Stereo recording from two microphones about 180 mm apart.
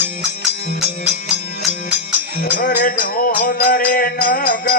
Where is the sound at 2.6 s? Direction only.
55° left (ahead or behind).